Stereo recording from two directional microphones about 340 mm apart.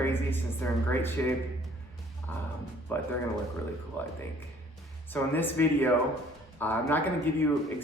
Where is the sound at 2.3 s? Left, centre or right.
Centre.